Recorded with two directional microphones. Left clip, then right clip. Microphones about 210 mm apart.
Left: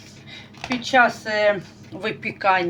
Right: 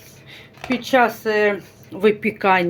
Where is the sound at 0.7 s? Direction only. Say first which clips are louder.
Even; 60° right (ahead or behind).